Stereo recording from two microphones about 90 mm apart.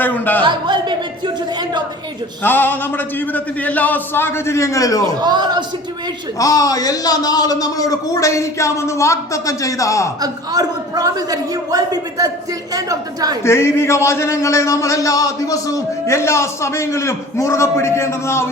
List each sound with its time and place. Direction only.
0.0 s a man's voice: 20° left (ahead or behind)
0.4 s a man's voice: 60° right (ahead or behind)
2.4 s a man's voice: 25° left (ahead or behind); by 5.1 s 40° left (ahead or behind)
5.1 s a man's voice: 55° right (ahead or behind)
6.4 s speech: 40° left (ahead or behind)
10.2 s a man's voice: 45° right (ahead or behind)
13.4 s speech: 30° left (ahead or behind)